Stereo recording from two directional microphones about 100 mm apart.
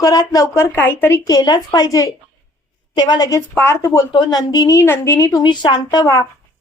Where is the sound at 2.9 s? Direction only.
50° left (ahead or behind).